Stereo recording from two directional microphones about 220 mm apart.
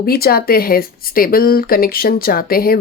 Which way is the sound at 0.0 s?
45° left (ahead or behind).